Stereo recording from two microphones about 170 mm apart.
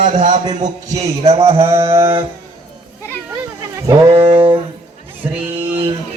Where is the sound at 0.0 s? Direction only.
50° right (ahead or behind).